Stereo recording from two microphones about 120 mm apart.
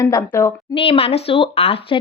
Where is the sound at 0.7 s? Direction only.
50° left (ahead or behind).